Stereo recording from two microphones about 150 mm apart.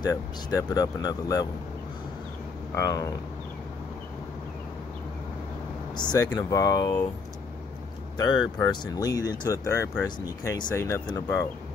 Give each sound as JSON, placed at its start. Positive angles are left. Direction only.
{"t": 0.0, "sound": "speech", "side_deg": 25}
{"t": 2.7, "sound": "speech", "side_deg": 20}
{"t": 5.9, "sound": "speech", "side_deg": 25}
{"t": 8.2, "sound": "speech", "side_deg": 25}